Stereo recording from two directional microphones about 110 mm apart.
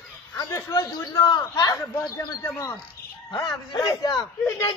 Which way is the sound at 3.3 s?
35° left (ahead or behind).